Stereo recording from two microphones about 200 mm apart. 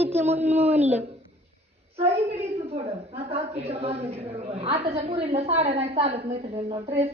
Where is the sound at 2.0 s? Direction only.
30° right (ahead or behind).